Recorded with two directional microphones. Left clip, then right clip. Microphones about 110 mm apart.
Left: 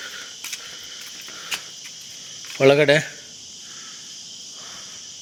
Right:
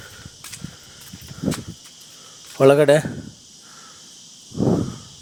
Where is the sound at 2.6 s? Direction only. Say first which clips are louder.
Right 2 dB; 55° right (ahead or behind).